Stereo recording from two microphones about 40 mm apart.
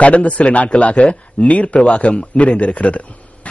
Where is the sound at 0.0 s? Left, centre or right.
Left.